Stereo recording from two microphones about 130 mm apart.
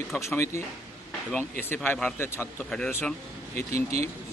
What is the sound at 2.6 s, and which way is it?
Speech, 5° left (ahead or behind).